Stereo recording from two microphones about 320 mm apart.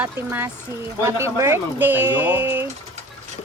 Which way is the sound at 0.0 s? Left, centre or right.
Centre.